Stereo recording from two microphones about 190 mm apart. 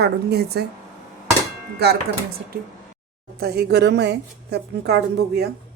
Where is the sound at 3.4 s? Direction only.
55° right (ahead or behind).